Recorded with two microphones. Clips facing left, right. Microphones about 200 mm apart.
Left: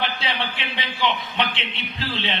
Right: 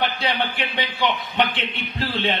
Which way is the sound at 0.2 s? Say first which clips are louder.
Right 4 dB; 40° right (ahead or behind).